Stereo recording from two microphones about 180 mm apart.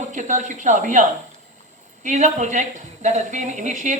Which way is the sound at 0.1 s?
45° right (ahead or behind).